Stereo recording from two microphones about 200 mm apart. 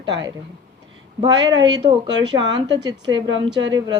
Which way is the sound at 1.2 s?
20° right (ahead or behind).